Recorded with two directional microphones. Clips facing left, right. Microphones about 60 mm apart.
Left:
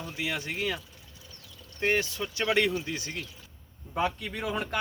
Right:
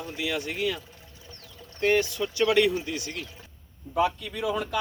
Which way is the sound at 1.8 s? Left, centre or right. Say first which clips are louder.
Right 4 dB; left.